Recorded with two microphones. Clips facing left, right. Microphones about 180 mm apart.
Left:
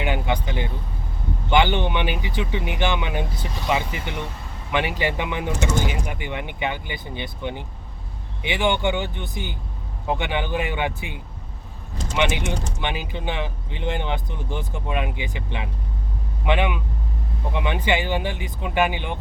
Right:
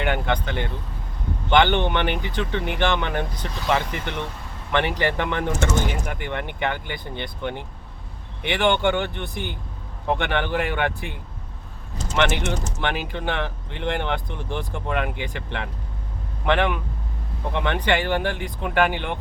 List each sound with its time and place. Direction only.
0.0 s speech: 10° left (ahead or behind)
8.7 s speech: 5° left (ahead or behind)
9.0 s speech: 60° right (ahead or behind)
10.1 s speech: 5° left (ahead or behind)